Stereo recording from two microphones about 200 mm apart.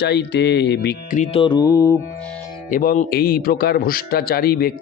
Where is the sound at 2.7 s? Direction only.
45° left (ahead or behind).